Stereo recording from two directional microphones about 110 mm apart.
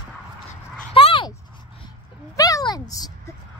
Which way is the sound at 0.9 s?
55° left (ahead or behind).